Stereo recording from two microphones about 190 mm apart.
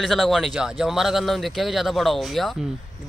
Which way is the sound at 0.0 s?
Centre (ahead or behind).